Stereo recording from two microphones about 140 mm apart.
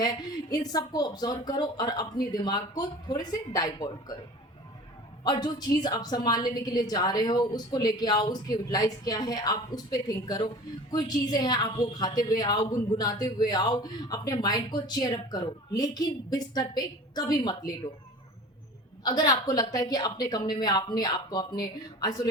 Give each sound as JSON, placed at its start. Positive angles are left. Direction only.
{"t": 0.0, "sound": "a man's voice", "side_deg": 30}
{"t": 5.2, "sound": "a man's voice", "side_deg": 30}
{"t": 19.0, "sound": "a man's voice", "side_deg": 25}